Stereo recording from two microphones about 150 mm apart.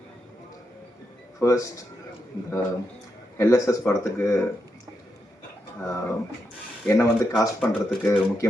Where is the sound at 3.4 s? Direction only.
20° left (ahead or behind).